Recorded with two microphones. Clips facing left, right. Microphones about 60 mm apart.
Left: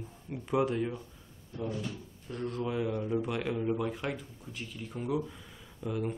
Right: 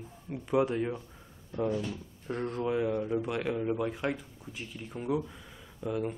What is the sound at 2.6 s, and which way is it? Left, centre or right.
Speech, centre.